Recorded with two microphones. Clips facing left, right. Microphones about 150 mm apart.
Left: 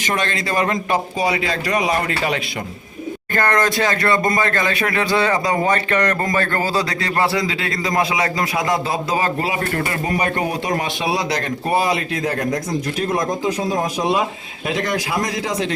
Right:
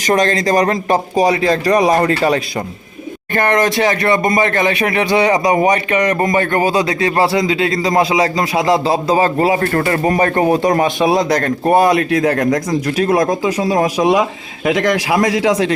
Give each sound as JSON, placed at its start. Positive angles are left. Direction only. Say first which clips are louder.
{"t": 0.0, "sound": "speech", "louder": "right 8 dB", "side_deg": -40}
{"t": 3.3, "sound": "speech", "louder": "right 4 dB", "side_deg": -20}
{"t": 9.7, "sound": "speech", "louder": "right 7 dB", "side_deg": -55}